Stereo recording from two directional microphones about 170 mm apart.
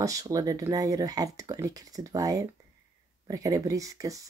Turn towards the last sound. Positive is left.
turn(degrees=-20)  # may be behind; listen again after turning